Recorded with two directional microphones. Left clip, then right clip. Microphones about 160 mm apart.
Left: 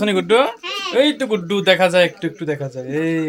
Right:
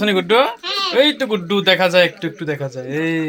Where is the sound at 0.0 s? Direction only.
10° left (ahead or behind).